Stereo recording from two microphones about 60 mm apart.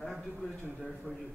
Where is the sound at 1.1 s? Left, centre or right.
Right.